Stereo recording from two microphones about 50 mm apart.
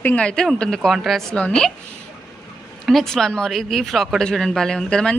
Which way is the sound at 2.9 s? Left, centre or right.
Centre.